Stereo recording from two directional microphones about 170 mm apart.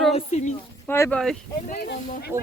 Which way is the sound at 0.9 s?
15° left (ahead or behind).